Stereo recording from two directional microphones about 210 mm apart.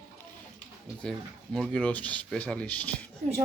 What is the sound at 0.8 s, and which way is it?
Speech, centre (ahead or behind).